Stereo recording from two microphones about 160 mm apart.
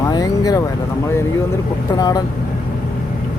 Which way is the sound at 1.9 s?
25° left (ahead or behind).